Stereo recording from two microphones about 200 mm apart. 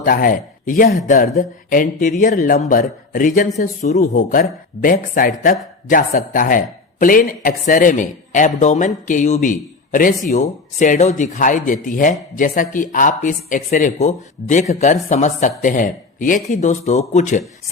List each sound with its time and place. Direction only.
0.0 s speech: 45° left (ahead or behind)